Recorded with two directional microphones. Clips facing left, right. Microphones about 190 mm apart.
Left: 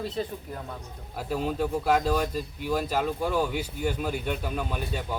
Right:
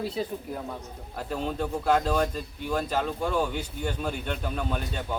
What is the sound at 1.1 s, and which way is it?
Speech, 10° left (ahead or behind).